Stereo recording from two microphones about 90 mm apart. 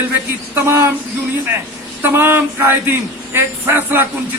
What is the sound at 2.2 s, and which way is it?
A man's voice, 25° right (ahead or behind).